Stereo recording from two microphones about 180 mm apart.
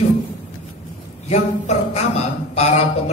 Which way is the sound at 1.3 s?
35° left (ahead or behind).